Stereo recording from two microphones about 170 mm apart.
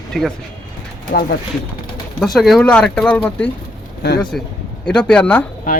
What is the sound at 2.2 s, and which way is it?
Speech, centre (ahead or behind).